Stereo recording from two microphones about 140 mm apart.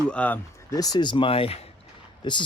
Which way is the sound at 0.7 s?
25° left (ahead or behind).